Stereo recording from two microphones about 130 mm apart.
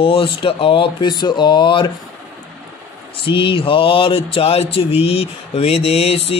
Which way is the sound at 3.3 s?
40° left (ahead or behind).